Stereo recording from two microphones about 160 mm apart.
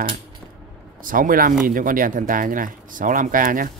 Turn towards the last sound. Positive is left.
turn(degrees=-60)  # may be behind; listen again after turning